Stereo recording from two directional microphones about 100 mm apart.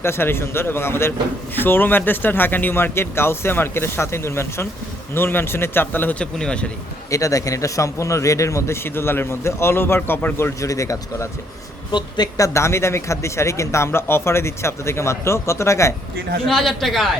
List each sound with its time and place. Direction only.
0.0 s a man's voice: 25° left (ahead or behind)
7.1 s a man's voice: 35° left (ahead or behind)
11.9 s speech: 45° left (ahead or behind)
12.4 s a man's voice: 30° left (ahead or behind)
16.5 s speech: 5° left (ahead or behind)